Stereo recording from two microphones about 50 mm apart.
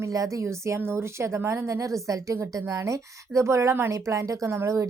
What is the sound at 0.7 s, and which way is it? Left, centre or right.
A woman's voice, right.